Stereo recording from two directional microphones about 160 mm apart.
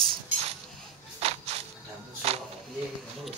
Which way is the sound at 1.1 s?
40° right (ahead or behind).